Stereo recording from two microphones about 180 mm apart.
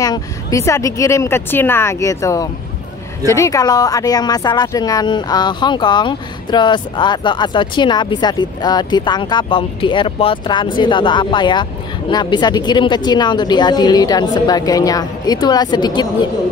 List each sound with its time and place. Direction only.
0.0 s speech: 20° left (ahead or behind)